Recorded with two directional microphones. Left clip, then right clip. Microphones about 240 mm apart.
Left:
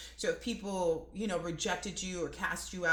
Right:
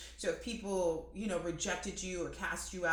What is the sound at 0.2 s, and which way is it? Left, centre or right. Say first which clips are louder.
Speech: left 3 dB; left.